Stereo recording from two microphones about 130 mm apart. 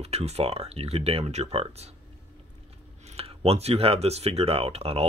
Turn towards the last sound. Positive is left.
turn(degrees=-50)  # may be behind; listen again after turning